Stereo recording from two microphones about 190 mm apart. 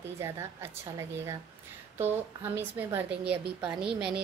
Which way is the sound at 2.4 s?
10° right (ahead or behind).